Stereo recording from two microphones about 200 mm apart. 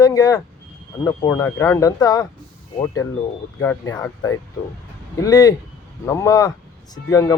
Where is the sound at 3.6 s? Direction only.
10° left (ahead or behind).